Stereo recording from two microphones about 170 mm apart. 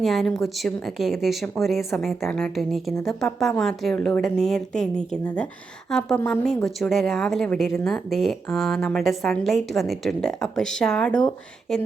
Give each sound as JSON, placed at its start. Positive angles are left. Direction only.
{"t": 0.0, "sound": "speech", "side_deg": 0}